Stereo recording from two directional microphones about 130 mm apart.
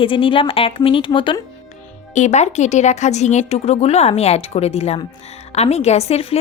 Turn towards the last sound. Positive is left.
turn(degrees=50)  # may be behind; listen again after turning